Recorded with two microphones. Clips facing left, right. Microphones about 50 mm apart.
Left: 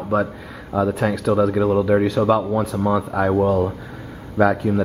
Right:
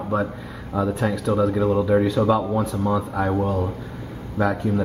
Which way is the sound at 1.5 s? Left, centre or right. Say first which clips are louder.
Left 2 dB; centre.